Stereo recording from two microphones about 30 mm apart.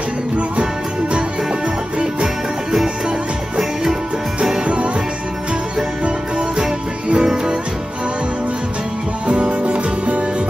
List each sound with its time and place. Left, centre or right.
6.5 s music: right
9.3 s music: right